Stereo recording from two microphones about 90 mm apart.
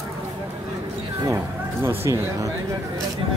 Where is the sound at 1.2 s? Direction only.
25° right (ahead or behind).